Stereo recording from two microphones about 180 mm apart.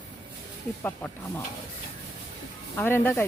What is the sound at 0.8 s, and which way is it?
Speech, 10° left (ahead or behind).